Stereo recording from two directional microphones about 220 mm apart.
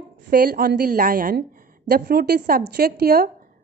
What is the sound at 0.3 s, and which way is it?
A woman's voice, 40° right (ahead or behind).